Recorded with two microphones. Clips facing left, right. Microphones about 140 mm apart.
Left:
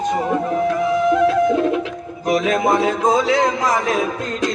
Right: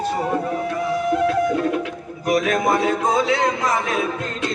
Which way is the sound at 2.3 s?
30° left (ahead or behind).